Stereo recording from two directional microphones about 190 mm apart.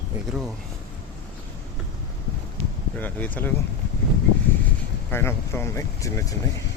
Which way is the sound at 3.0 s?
10° left (ahead or behind).